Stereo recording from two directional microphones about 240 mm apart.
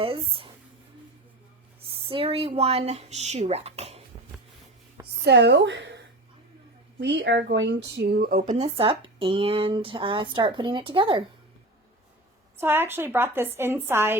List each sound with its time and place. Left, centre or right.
0.0 s speech: right
2.0 s speech: right
5.2 s speech: right
7.0 s speech: right
12.5 s a woman's voice: centre